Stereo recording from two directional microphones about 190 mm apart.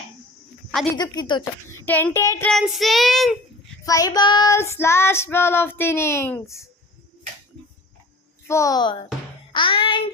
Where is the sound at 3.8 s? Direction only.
20° left (ahead or behind).